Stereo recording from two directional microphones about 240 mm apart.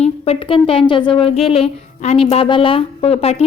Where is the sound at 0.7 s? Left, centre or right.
Left.